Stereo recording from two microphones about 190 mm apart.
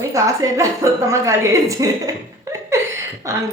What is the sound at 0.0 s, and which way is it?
Speech, 15° right (ahead or behind).